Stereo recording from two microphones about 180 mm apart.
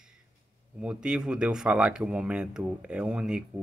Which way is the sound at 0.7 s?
5° right (ahead or behind).